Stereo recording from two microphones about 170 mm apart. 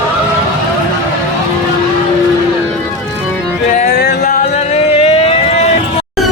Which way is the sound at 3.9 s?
70° left (ahead or behind).